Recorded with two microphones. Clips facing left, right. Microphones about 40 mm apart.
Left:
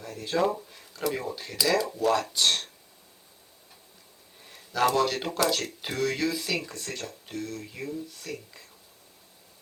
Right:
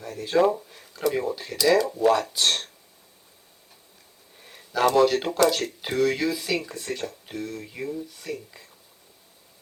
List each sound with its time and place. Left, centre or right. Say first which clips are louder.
0.0 s speech: right 5 dB; centre
4.4 s a sound: right 2 dB; centre
4.9 s speech: right 10 dB; centre